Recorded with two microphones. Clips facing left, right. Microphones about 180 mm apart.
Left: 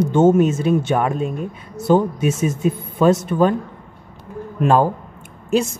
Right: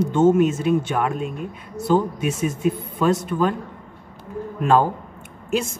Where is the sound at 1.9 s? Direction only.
25° left (ahead or behind).